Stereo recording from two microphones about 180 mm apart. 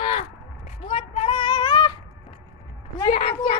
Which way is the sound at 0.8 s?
30° left (ahead or behind).